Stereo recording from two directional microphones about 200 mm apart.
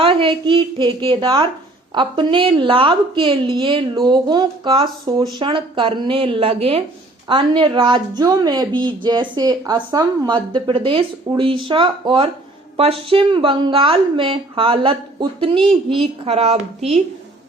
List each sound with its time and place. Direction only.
0.0 s a woman's voice: 25° right (ahead or behind)
15.5 s a woman's voice: centre (ahead or behind)
15.9 s a woman's voice: 25° right (ahead or behind)